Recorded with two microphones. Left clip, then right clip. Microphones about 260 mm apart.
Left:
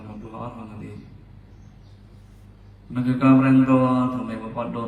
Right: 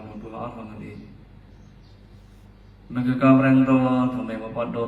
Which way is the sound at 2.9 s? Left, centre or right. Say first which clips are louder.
Even; left.